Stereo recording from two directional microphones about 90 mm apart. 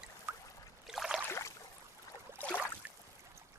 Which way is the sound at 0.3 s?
20° right (ahead or behind).